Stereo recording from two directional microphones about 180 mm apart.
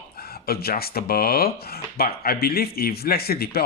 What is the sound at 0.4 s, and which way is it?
Speech, 60° left (ahead or behind).